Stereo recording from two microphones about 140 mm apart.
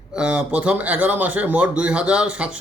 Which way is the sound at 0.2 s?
5° right (ahead or behind).